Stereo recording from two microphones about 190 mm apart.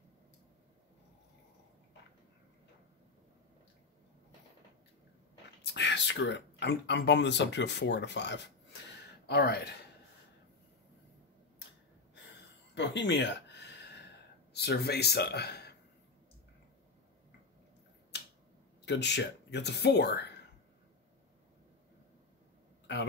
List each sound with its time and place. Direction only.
5.6 s speech: 65° left (ahead or behind)
12.7 s a sound: 70° left (ahead or behind)
14.5 s speech: 60° left (ahead or behind)
18.9 s speech: 65° left (ahead or behind)
22.9 s a man's voice: 65° left (ahead or behind)